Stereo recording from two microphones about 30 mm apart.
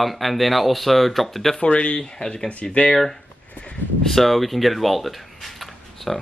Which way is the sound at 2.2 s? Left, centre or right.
Left.